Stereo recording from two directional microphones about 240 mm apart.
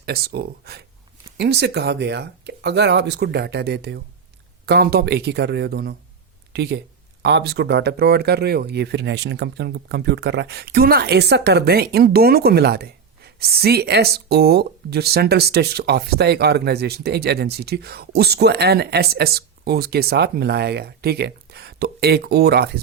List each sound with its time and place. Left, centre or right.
0.0 s speech: right